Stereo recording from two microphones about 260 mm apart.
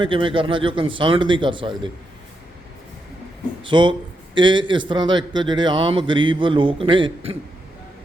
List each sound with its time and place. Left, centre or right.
0.0 s speech: centre
3.6 s a man's voice: centre